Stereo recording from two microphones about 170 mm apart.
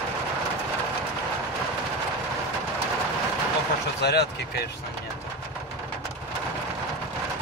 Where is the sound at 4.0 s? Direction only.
70° left (ahead or behind).